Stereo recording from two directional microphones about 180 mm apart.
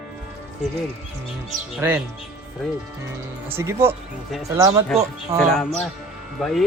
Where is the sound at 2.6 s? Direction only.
Centre (ahead or behind).